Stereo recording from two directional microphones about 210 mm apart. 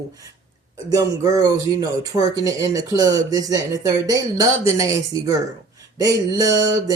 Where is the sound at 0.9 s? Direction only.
15° right (ahead or behind).